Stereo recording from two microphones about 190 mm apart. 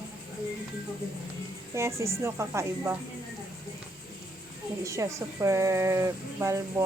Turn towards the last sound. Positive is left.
turn(degrees=-15)  # may be behind; listen again after turning